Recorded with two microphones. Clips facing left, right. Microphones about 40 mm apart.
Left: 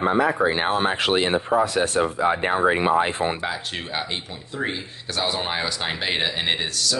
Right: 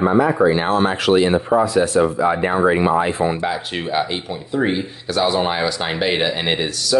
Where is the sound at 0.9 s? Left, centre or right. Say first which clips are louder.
Right 5 dB; left.